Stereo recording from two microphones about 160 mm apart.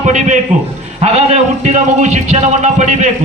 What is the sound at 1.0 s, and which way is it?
Speech, 45° right (ahead or behind).